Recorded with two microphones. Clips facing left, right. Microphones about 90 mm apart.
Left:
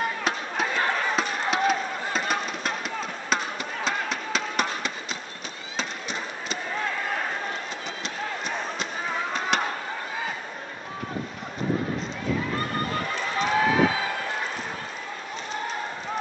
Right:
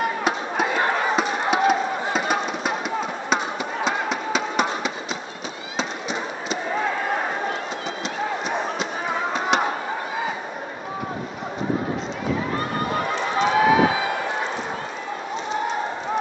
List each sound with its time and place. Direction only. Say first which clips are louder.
0.2 s a sound: right 5 dB; 5° right (ahead or behind)
1.0 s chop: right 5 dB; 5° right (ahead or behind)
1.4 s a sound: right 5 dB; 5° right (ahead or behind)
6.7 s basketball bounce: right 5 dB; 25° right (ahead or behind)
9.3 s fireworks: right 5 dB; 5° right (ahead or behind)
13.4 s run: right 4 dB; 5° right (ahead or behind)